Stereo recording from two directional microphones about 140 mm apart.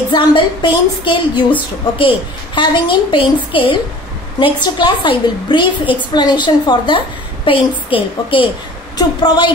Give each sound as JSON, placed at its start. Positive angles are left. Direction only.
{"t": 0.1, "sound": "a woman's voice", "side_deg": 35}